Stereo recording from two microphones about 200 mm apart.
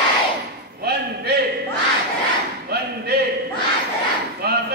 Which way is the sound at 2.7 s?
55° right (ahead or behind).